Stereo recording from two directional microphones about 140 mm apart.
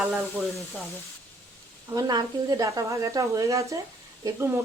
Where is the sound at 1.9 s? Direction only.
25° right (ahead or behind).